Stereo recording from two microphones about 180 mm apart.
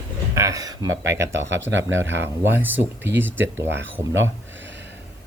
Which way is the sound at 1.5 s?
90° right.